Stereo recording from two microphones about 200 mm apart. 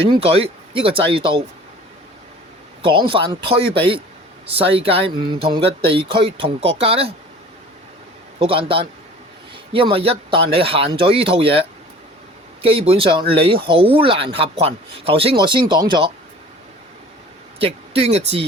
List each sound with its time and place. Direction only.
0.1 s speech: 30° right (ahead or behind)
3.1 s speech: 25° right (ahead or behind)
8.4 s speech: 25° right (ahead or behind)
12.6 s speech: 30° right (ahead or behind)
17.6 s speech: 30° right (ahead or behind)